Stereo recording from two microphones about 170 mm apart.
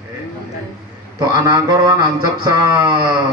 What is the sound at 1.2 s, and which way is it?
Speech, 20° right (ahead or behind).